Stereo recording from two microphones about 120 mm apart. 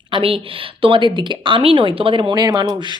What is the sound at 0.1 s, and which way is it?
Speech, 50° right (ahead or behind).